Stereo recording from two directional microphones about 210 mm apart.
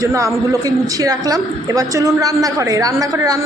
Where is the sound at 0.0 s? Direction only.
15° right (ahead or behind).